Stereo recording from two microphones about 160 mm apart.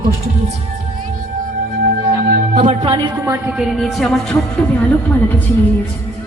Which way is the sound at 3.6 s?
Centre (ahead or behind).